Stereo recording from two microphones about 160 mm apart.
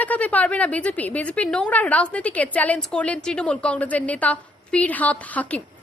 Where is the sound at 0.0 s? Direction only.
10° left (ahead or behind).